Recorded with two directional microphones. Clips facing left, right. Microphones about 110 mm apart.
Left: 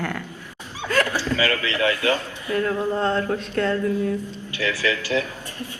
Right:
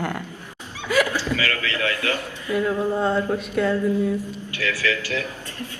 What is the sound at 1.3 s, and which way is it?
A man's voice, 20° left (ahead or behind).